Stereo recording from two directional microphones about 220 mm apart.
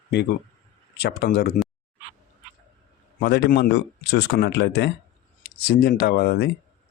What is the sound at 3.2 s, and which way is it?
Speech, 45° left (ahead or behind).